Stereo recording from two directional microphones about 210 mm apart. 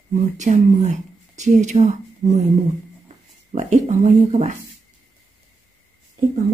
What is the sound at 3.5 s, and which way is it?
Speech, 35° right (ahead or behind).